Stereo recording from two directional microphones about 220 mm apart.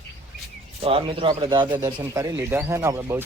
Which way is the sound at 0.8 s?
25° right (ahead or behind).